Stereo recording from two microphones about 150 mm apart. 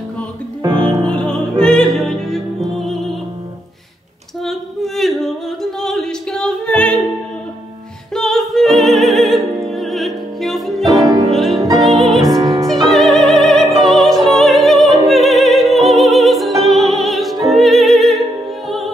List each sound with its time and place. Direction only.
0.6 s music: 20° right (ahead or behind)
1.0 s music: 5° left (ahead or behind)
4.5 s music: centre (ahead or behind)
8.1 s music: centre (ahead or behind)
11.0 s music: 25° right (ahead or behind)
11.3 s music: centre (ahead or behind)
12.3 s music: 25° right (ahead or behind)
12.8 s music: centre (ahead or behind)
14.2 s opera: centre (ahead or behind)